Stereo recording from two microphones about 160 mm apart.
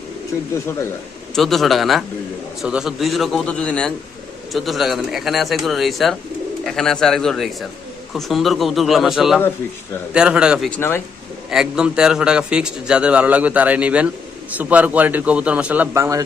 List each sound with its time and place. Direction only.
0.3 s speech: 20° left (ahead or behind)
1.4 s speech: centre (ahead or behind)
10.7 s speech: 15° left (ahead or behind)
11.5 s a man's voice: 5° right (ahead or behind)